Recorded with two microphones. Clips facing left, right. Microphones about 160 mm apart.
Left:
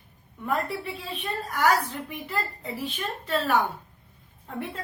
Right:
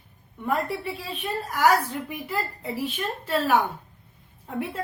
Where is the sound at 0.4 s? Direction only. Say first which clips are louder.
Right 2 dB; centre (ahead or behind).